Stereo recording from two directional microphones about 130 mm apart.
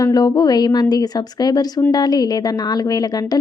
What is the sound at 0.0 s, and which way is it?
A woman's voice, 30° left (ahead or behind).